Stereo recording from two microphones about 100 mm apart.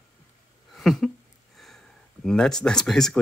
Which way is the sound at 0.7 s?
Centre (ahead or behind).